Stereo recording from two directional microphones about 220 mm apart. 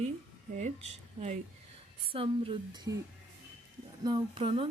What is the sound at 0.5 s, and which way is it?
Speech, 30° right (ahead or behind).